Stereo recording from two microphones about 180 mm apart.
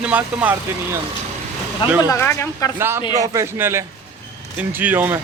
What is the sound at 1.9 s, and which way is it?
Speech, 15° left (ahead or behind).